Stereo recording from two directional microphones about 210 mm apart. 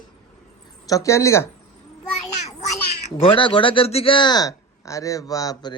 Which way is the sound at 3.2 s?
25° left (ahead or behind).